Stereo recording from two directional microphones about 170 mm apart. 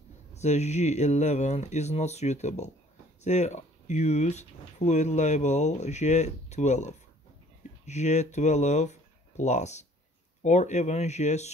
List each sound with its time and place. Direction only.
0.3 s speech: 40° left (ahead or behind)